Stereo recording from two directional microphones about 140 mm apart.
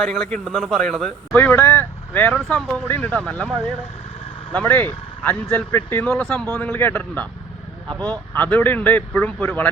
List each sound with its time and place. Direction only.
0.0 s a man's voice: 5° left (ahead or behind)
4.5 s a man's voice: 10° left (ahead or behind)